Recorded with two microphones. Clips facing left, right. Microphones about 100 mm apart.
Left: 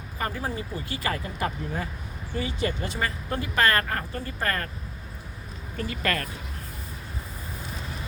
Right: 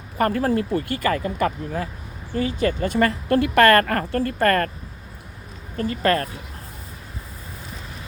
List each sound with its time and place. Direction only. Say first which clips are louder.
0.2 s a woman's voice: right 11 dB; 70° right (ahead or behind)
2.3 s speech: right 7 dB; 45° right (ahead or behind)
3.2 s a woman's voice: right 9 dB; 70° right (ahead or behind)
5.7 s speech: right 8 dB; 40° right (ahead or behind)